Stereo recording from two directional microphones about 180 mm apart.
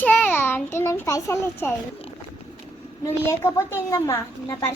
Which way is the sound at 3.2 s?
15° left (ahead or behind).